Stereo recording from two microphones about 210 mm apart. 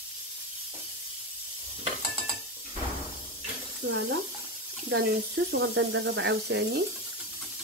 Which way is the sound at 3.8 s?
60° right (ahead or behind).